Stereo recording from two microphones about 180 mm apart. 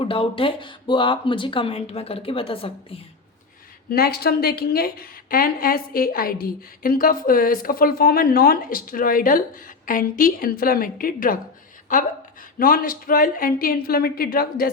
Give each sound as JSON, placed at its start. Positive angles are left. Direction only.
{"t": 0.0, "sound": "speech", "side_deg": 30}
{"t": 3.8, "sound": "a woman's voice", "side_deg": 60}